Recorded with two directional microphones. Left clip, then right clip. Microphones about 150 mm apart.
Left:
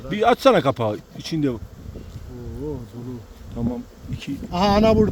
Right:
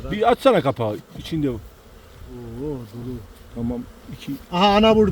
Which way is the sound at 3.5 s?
10° left (ahead or behind).